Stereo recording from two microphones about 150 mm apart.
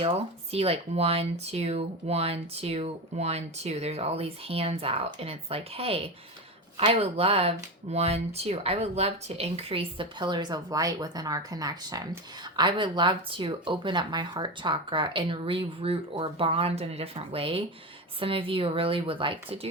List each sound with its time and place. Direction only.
0.0 s speech: 40° right (ahead or behind)